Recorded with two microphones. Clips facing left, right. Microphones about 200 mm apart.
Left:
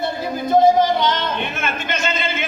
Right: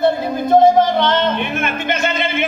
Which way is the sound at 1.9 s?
55° right (ahead or behind).